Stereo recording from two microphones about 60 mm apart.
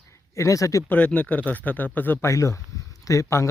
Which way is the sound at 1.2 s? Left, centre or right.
Left.